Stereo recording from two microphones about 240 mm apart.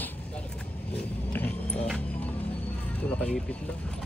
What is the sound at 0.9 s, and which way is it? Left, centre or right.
Vehicle, centre.